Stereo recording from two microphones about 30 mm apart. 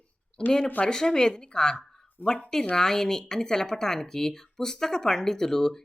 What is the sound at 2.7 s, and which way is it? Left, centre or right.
Speech, centre.